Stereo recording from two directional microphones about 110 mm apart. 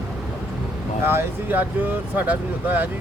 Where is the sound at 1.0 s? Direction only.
20° right (ahead or behind).